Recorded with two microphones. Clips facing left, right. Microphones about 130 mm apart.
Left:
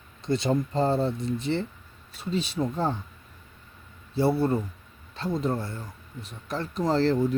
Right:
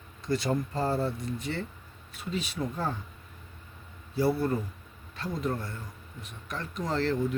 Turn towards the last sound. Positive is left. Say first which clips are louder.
# left 6 dB
turn(degrees=30)  # may be behind; listen again after turning